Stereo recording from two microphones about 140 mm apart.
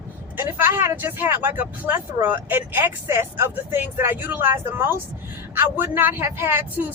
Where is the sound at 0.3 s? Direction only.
15° right (ahead or behind).